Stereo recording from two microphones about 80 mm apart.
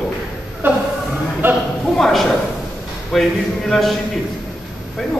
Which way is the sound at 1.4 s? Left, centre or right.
Right.